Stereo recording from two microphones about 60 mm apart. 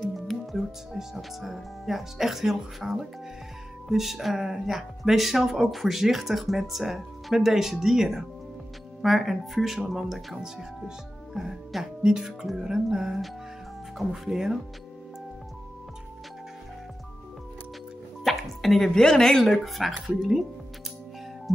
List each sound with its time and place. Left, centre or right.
0.0 s speech: centre
18.2 s speech: centre